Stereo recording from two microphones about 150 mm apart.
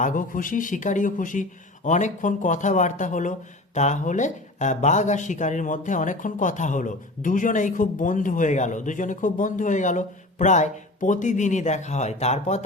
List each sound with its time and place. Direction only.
0.0 s speech: 60° left (ahead or behind)